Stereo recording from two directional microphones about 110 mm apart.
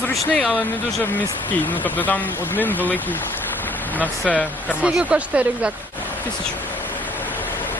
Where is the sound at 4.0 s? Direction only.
15° left (ahead or behind).